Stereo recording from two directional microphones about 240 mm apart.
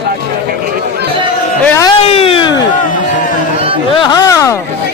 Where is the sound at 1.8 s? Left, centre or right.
Left.